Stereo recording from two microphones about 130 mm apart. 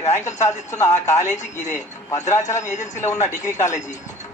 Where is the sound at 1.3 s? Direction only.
65° left (ahead or behind).